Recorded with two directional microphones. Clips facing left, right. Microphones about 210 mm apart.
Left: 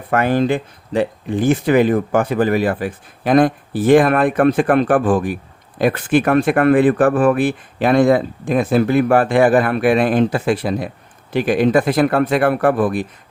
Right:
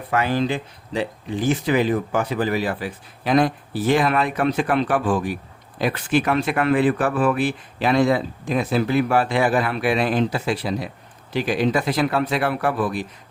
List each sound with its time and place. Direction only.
0.1 s speech: 55° left (ahead or behind)